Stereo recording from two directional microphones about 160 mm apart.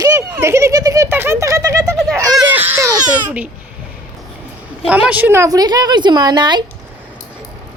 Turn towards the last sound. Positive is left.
turn(degrees=-30)  # may be behind; listen again after turning